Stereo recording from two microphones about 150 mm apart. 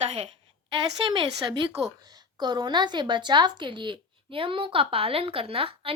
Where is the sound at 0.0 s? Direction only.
40° right (ahead or behind).